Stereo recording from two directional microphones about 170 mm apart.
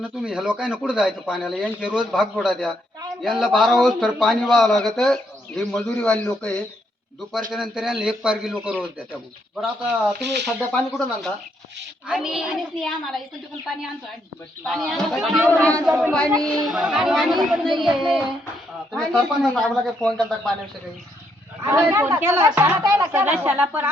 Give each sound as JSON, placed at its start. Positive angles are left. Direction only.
{"t": 0.0, "sound": "a man's voice", "side_deg": -5}
{"t": 10.2, "sound": "speech", "side_deg": -85}
{"t": 10.4, "sound": "a man's voice", "side_deg": 5}
{"t": 14.6, "sound": "a man's voice", "side_deg": 0}
{"t": 21.6, "sound": "speech", "side_deg": -15}